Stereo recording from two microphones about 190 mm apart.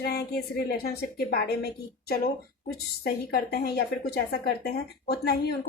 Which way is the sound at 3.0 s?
55° left (ahead or behind).